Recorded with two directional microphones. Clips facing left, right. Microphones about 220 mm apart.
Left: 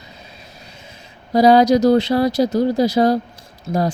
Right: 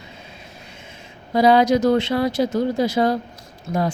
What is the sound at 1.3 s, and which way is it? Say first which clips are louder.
Speech: left 3 dB; 40° left (ahead or behind).